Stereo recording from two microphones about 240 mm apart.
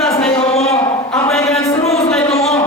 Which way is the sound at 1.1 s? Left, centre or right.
Centre.